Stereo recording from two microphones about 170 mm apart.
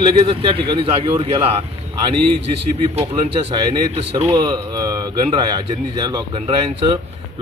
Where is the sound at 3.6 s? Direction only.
25° right (ahead or behind).